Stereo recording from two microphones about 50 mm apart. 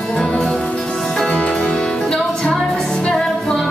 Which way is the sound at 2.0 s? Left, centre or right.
Centre.